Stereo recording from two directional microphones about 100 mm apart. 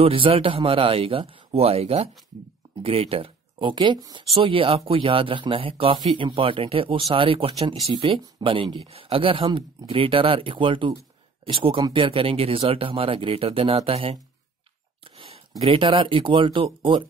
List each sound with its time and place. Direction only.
0.0 s speech: 65° right (ahead or behind); by 2.0 s 85° right
2.8 s speech: 70° right (ahead or behind); by 4.2 s 50° right (ahead or behind)
4.3 s speech: 60° right (ahead or behind)
8.8 s speech: 70° right (ahead or behind)
15.0 s a sound: 60° right (ahead or behind)
15.6 s speech: 60° right (ahead or behind)